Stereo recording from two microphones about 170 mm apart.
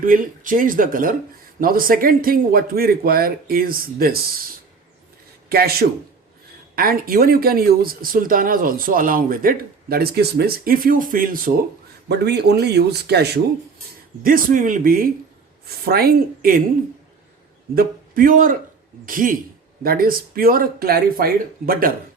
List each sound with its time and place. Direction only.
0.0 s speech: 55° right (ahead or behind)
5.5 s a man's voice: 65° right (ahead or behind)
6.7 s speech: 60° right (ahead or behind)
12.0 s a man's voice: 75° right (ahead or behind)
14.2 s speech: 55° right (ahead or behind)
17.7 s a man's voice: 55° right (ahead or behind)